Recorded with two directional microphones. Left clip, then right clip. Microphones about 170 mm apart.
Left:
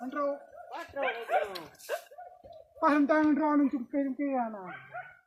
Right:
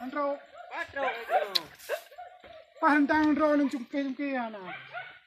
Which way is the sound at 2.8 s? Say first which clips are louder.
Right 1 dB; 55° left (ahead or behind).